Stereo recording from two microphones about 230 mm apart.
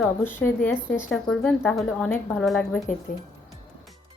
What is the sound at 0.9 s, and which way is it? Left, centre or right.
Speech, centre.